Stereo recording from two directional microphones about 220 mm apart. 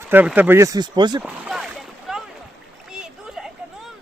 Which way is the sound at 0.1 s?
10° right (ahead or behind).